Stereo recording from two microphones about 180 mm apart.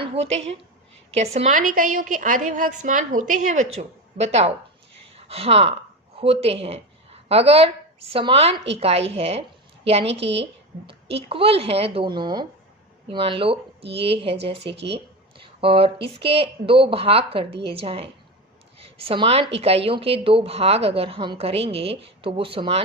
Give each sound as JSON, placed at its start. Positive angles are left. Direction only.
{"t": 0.1, "sound": "a woman's voice", "side_deg": -35}
{"t": 14.6, "sound": "speech", "side_deg": -75}
{"t": 15.4, "sound": "a sound", "side_deg": -30}
{"t": 16.2, "sound": "a woman's voice", "side_deg": -30}